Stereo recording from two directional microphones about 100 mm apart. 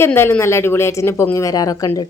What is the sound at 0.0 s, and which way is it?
Speech, 25° left (ahead or behind).